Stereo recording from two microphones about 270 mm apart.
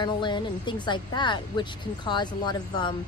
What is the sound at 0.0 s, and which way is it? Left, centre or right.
A woman's voice, centre.